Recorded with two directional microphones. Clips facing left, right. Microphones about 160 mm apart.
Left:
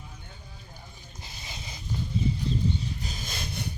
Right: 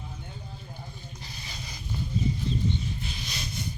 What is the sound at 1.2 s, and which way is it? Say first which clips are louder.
Boat: left 2 dB; 20° left (ahead or behind).